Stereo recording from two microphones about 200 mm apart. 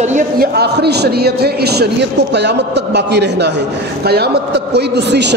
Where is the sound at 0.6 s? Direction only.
55° right (ahead or behind).